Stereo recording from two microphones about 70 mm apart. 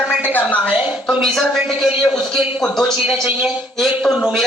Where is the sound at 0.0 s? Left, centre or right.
Centre.